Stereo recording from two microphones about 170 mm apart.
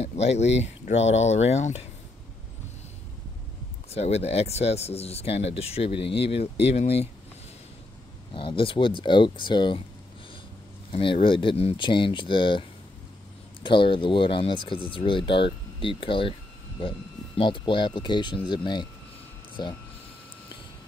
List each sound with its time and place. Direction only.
0.0 s speech: 40° left (ahead or behind)
3.9 s speech: 40° left (ahead or behind)
8.3 s speech: 30° left (ahead or behind)
10.9 s speech: 30° left (ahead or behind)
17.4 s speech: 30° left (ahead or behind)